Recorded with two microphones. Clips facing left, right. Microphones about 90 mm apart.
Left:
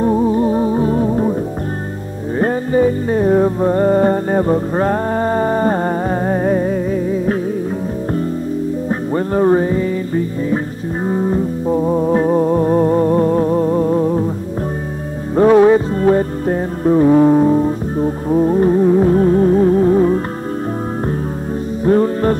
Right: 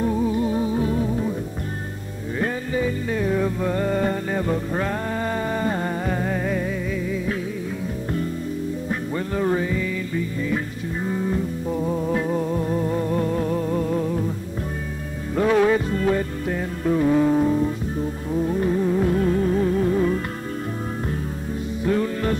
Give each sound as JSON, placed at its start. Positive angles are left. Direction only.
{"t": 0.0, "sound": "music", "side_deg": 40}
{"t": 2.3, "sound": "music", "side_deg": 40}
{"t": 8.8, "sound": "music", "side_deg": 40}
{"t": 15.3, "sound": "music", "side_deg": 35}
{"t": 21.8, "sound": "music", "side_deg": 40}